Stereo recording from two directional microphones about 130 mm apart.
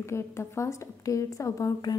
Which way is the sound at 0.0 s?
20° left (ahead or behind).